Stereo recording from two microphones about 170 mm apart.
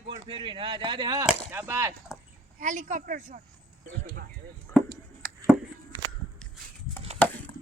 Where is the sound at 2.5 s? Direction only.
45° right (ahead or behind).